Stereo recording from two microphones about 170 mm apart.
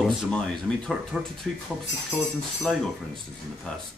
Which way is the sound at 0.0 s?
Centre (ahead or behind).